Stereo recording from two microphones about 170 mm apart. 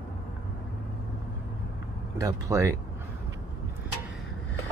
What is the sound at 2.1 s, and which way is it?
Speech, 20° right (ahead or behind).